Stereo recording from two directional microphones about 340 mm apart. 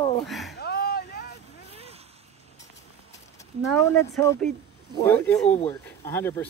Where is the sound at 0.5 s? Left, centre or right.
Left.